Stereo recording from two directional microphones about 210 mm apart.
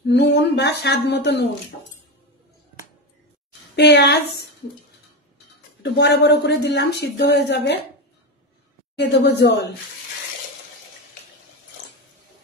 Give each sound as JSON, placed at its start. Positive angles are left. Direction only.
{"t": 0.0, "sound": "speech", "side_deg": 55}
{"t": 3.7, "sound": "speech", "side_deg": 55}
{"t": 5.8, "sound": "speech", "side_deg": 55}
{"t": 8.9, "sound": "a woman's voice", "side_deg": 55}